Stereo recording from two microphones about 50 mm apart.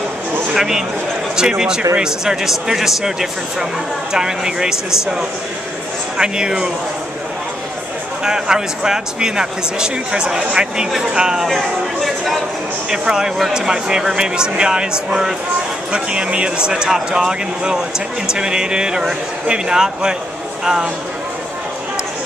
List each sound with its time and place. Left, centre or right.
0.6 s speech: centre
8.2 s speech: centre
11.4 s speech: centre
12.9 s speech: centre